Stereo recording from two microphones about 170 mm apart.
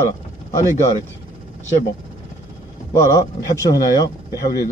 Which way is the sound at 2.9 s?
20° left (ahead or behind).